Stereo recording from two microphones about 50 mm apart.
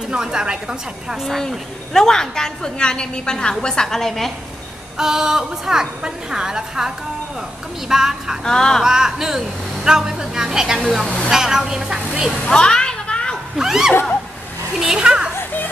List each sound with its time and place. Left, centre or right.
0.1 s a woman's voice: centre
1.5 s a woman's voice: centre
4.9 s a woman's voice: centre
7.9 s a woman's voice: centre
8.5 s a woman's voice: centre
8.8 s a woman's voice: centre
12.4 s children playing: centre
13.6 s a woman's voice: centre